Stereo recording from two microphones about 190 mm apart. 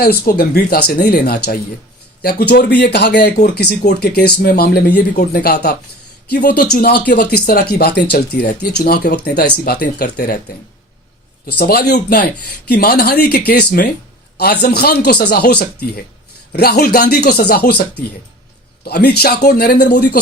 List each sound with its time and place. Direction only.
0.0 s speech: 55° left (ahead or behind)
11.5 s speech: 55° left (ahead or behind)
18.9 s speech: 55° left (ahead or behind)